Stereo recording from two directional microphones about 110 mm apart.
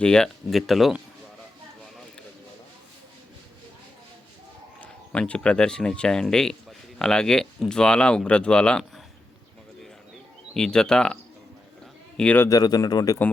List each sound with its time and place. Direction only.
0.0 s speech: 10° left (ahead or behind)
4.8 s speech: 10° left (ahead or behind)
10.5 s a man's voice: 5° left (ahead or behind)
12.5 s speech: 35° left (ahead or behind)